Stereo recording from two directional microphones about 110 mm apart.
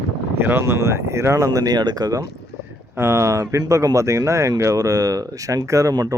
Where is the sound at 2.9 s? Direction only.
25° right (ahead or behind).